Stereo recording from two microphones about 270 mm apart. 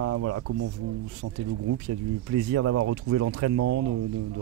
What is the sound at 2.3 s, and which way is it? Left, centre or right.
Speech, right.